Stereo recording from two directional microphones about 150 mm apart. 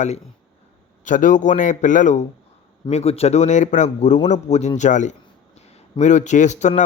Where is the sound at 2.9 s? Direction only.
45° left (ahead or behind).